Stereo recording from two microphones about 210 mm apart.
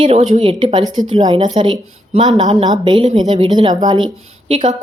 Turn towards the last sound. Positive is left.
turn(degrees=-30)  # may be behind; listen again after turning